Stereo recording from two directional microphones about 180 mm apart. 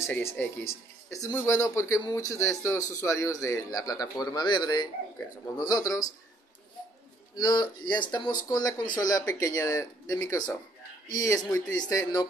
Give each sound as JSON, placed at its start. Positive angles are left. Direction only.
{"t": 0.0, "sound": "speech", "side_deg": 10}
{"t": 7.3, "sound": "speech", "side_deg": 25}